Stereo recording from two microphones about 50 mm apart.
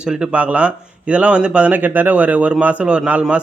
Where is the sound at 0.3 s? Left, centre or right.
Right.